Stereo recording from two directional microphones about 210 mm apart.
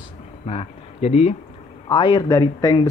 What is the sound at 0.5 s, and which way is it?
Speech, 30° left (ahead or behind).